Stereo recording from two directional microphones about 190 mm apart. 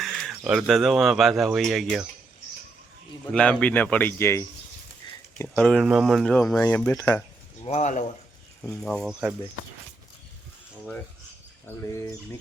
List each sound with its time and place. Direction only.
0.0 s speech: centre (ahead or behind)
3.3 s speech: 5° left (ahead or behind)
7.6 s speech: 35° left (ahead or behind)
8.6 s speech: 5° left (ahead or behind)
11.6 s speech: 15° left (ahead or behind)